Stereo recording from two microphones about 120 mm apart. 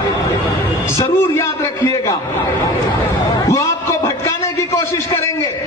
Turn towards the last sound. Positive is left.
turn(degrees=25)  # may be behind; listen again after turning